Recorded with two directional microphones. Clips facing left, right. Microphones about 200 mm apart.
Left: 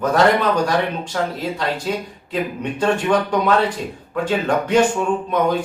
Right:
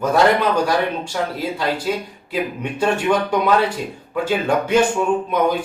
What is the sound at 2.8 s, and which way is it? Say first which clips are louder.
Speech: even; 10° right (ahead or behind).